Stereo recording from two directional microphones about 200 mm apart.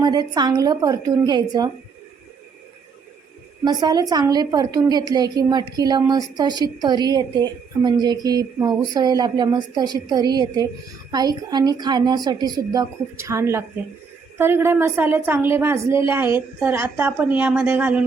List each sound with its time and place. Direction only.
0.0 s a woman's voice: 20° right (ahead or behind)
3.6 s a woman's voice: 20° right (ahead or behind)